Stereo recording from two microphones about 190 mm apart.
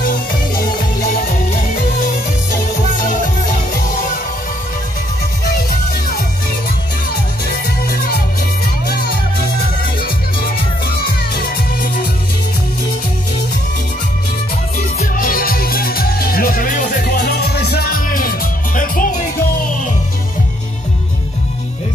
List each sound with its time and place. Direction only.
1.0 s music: 50° left (ahead or behind)
7.1 s music: 55° left (ahead or behind)
14.8 s music: 45° left (ahead or behind)